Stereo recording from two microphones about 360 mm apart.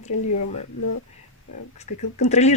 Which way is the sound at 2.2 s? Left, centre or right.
Centre.